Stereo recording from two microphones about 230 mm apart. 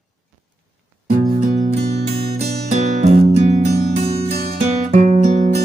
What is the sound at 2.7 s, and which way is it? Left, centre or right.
Music, right.